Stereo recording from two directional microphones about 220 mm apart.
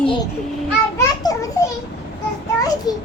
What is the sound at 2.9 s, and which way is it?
Speech, 15° left (ahead or behind).